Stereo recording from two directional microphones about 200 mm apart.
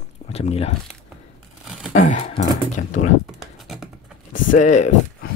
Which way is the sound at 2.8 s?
40° left (ahead or behind).